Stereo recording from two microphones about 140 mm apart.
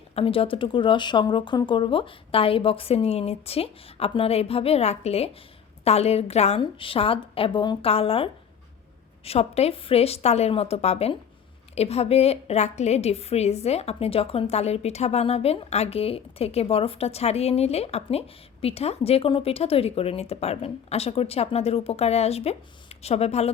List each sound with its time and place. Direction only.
0.2 s a woman's voice: 40° left (ahead or behind)
6.6 s a woman's voice: 40° left (ahead or behind)